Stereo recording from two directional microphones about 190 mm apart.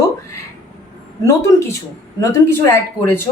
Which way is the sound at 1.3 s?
15° left (ahead or behind).